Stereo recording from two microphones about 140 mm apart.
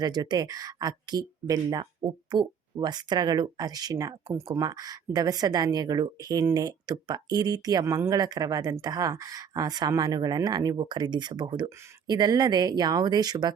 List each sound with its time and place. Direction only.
0.0 s speech: 30° right (ahead or behind)